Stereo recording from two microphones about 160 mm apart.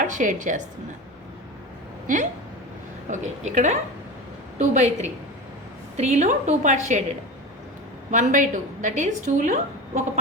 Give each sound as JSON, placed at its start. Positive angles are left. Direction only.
{"t": 0.0, "sound": "a woman's voice", "side_deg": -55}
{"t": 3.1, "sound": "a woman's voice", "side_deg": -50}
{"t": 8.1, "sound": "a woman's voice", "side_deg": -50}